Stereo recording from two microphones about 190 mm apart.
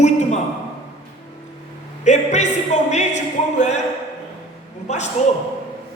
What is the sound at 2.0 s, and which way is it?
Speech, 35° left (ahead or behind).